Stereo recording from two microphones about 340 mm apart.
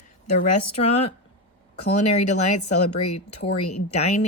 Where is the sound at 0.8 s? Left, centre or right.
Centre.